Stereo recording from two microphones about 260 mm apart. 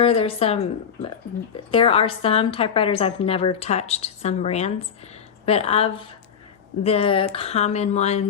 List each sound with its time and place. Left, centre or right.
0.0 s a woman's voice: left